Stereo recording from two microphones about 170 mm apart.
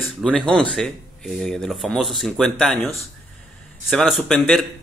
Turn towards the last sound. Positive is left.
turn(degrees=0)  # may be behind; listen again after turning